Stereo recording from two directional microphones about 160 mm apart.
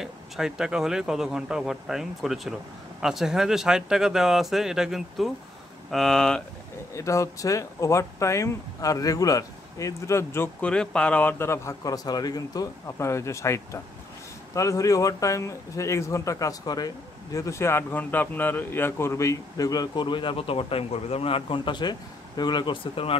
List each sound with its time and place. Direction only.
0.0 s speech: 5° right (ahead or behind)
7.0 s speech: 20° left (ahead or behind)